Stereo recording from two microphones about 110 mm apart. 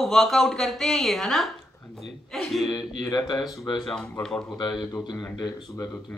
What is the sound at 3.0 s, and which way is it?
Speech, 35° left (ahead or behind).